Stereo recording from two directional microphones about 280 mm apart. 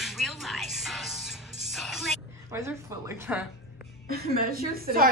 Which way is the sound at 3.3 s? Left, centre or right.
Centre.